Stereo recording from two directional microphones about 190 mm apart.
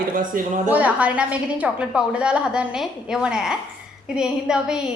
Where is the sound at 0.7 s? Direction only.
5° right (ahead or behind).